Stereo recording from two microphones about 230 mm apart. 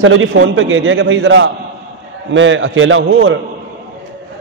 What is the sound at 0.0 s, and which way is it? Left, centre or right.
A man's voice, right.